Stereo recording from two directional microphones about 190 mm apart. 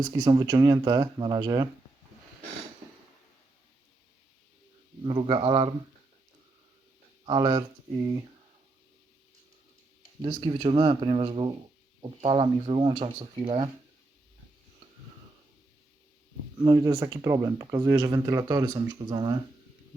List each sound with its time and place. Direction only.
0.1 s speech: 20° right (ahead or behind)
5.0 s speech: 25° right (ahead or behind)
7.3 s speech: 25° right (ahead or behind)
10.2 s speech: 25° right (ahead or behind)
16.6 s speech: 20° right (ahead or behind)